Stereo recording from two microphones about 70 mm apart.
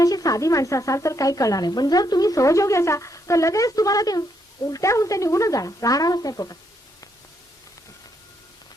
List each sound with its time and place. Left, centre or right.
0.0 s speech: left
1.6 s speech: left